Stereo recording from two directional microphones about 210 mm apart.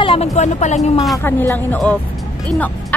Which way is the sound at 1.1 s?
10° left (ahead or behind).